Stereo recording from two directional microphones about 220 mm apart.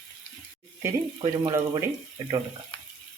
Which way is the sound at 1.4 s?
15° right (ahead or behind).